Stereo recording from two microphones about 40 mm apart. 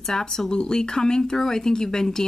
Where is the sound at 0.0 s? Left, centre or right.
Centre.